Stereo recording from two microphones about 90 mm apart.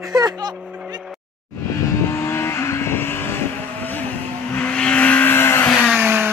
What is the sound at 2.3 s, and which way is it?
Vehicle, 30° left (ahead or behind).